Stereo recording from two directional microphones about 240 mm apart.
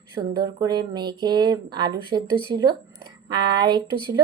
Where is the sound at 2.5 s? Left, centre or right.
Right.